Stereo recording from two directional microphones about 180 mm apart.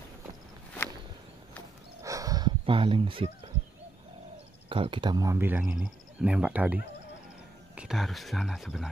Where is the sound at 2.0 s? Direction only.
20° right (ahead or behind).